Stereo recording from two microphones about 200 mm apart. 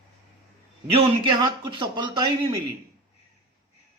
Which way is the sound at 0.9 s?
20° right (ahead or behind).